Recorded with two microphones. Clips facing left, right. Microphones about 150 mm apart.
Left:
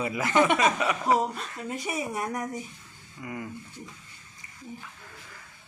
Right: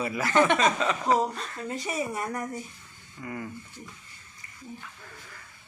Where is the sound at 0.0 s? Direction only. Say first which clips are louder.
Even; 20° left (ahead or behind).